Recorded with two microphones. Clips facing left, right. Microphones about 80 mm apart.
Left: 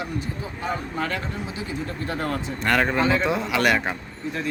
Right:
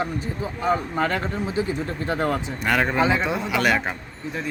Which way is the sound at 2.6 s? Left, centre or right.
Centre.